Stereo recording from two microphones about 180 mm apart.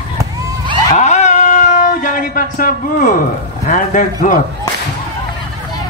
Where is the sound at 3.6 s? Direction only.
45° left (ahead or behind).